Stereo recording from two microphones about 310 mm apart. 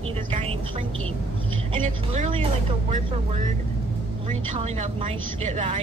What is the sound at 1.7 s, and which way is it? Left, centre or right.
Speech, right.